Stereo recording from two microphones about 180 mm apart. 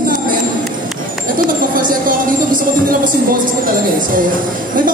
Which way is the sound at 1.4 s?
50° right (ahead or behind).